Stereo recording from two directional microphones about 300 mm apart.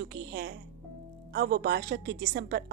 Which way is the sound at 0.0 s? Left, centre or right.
Right.